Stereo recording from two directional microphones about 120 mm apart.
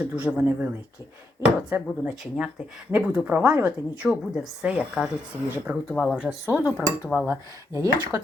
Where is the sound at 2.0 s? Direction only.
10° right (ahead or behind).